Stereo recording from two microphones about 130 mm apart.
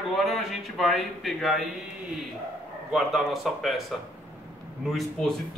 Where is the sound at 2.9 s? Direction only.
Centre (ahead or behind).